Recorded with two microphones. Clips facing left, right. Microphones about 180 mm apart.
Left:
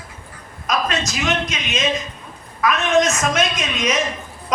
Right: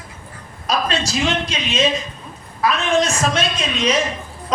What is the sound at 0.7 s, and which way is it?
A man's voice, 30° right (ahead or behind).